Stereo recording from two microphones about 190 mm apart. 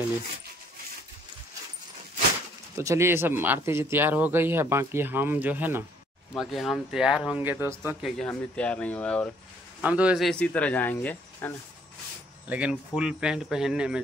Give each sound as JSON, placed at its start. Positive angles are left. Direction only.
{"t": 2.8, "sound": "speech", "side_deg": -15}
{"t": 6.3, "sound": "speech", "side_deg": 0}
{"t": 8.0, "sound": "speech", "side_deg": 5}
{"t": 9.8, "sound": "speech", "side_deg": -5}
{"t": 12.4, "sound": "speech", "side_deg": -5}